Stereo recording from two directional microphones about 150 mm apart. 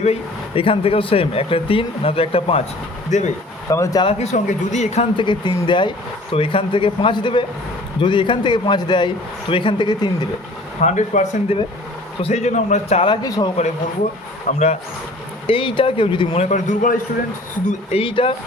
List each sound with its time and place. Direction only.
0.0 s speech: 40° left (ahead or behind)
3.1 s speech: 50° left (ahead or behind)
3.7 s speech: 20° left (ahead or behind)
4.0 s speech: 50° left (ahead or behind)
5.1 s speech: 30° left (ahead or behind)
10.8 s speech: 55° left (ahead or behind)
13.2 s speech: 25° left (ahead or behind)
14.5 s a man's voice: 60° left (ahead or behind)
15.4 s speech: 35° left (ahead or behind)
16.3 s a man's voice: 50° left (ahead or behind)
17.7 s speech: 40° left (ahead or behind)